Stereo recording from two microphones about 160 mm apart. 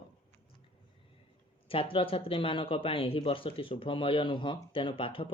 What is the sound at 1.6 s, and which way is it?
Speech, 35° left (ahead or behind).